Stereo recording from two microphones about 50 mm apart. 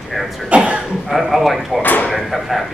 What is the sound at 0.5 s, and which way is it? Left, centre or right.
Cough, right.